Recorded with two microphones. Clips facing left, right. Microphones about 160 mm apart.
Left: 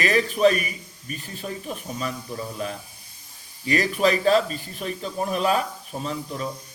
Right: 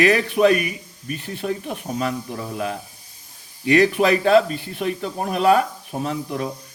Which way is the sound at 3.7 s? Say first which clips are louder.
Right 5 dB; 65° right (ahead or behind).